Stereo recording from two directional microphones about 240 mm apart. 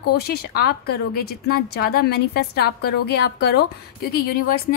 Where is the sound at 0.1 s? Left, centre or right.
Left.